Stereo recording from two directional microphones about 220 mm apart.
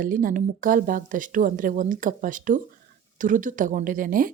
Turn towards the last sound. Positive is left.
turn(degrees=-40)  # may be behind; listen again after turning